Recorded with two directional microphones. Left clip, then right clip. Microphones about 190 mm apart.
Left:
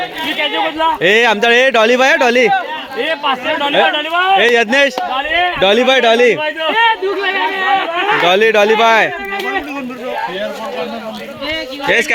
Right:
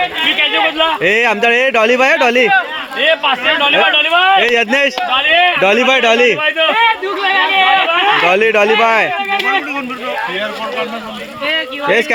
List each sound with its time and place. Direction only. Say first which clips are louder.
0.3 s speech: right 3 dB; 30° right (ahead or behind)
1.0 s speech: left 3 dB; centre (ahead or behind)
3.1 s a man's voice: right 4 dB; 35° right (ahead or behind)
4.4 s speech: left 1 dB; centre (ahead or behind)
5.1 s a sound: right 4 dB; 35° right (ahead or behind)
5.5 s a man's voice: even; 5° right (ahead or behind)
6.7 s a sound: even; 50° right (ahead or behind)
8.2 s speech: even; centre (ahead or behind)
11.9 s speech: even; 5° right (ahead or behind)